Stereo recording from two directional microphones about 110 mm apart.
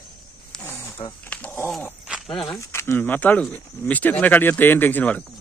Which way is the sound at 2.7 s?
20° left (ahead or behind).